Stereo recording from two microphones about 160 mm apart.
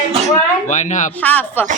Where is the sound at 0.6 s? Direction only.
50° left (ahead or behind).